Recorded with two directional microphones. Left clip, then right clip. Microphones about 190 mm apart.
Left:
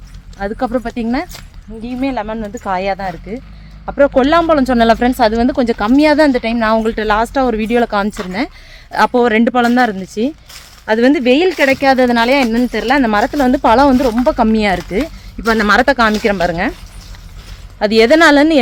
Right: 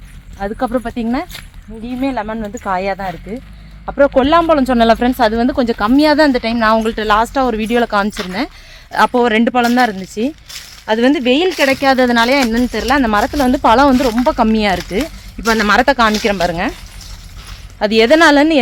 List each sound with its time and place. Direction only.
0.3 s speech: 5° right (ahead or behind)
17.7 s speech: centre (ahead or behind)